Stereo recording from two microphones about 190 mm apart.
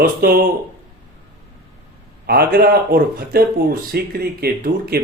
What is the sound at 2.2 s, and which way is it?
Speech, 55° right (ahead or behind).